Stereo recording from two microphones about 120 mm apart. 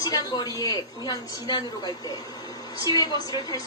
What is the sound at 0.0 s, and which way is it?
A woman's voice, 30° left (ahead or behind).